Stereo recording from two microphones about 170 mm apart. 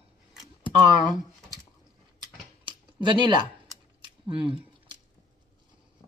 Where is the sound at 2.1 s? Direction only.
30° right (ahead or behind).